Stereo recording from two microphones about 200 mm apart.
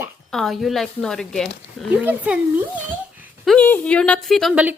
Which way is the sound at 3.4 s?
5° left (ahead or behind).